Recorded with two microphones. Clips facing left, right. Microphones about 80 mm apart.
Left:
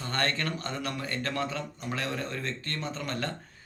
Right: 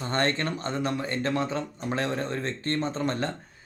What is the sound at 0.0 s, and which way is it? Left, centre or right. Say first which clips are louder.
A man's voice: right 4 dB; right.